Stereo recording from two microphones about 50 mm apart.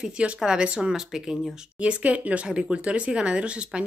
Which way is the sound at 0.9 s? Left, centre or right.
Centre.